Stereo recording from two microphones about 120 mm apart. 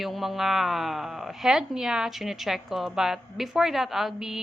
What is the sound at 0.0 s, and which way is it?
A woman's voice, centre (ahead or behind).